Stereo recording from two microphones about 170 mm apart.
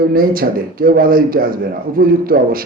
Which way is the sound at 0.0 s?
60° right (ahead or behind).